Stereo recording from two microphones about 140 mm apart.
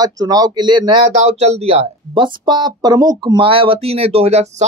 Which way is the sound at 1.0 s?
55° right (ahead or behind).